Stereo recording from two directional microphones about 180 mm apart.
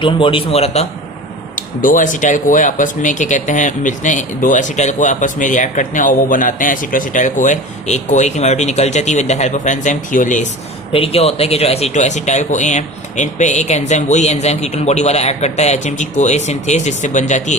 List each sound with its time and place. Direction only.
0.0 s a man's voice: 30° left (ahead or behind)
1.5 s speech: 45° left (ahead or behind)
10.9 s speech: 35° left (ahead or behind)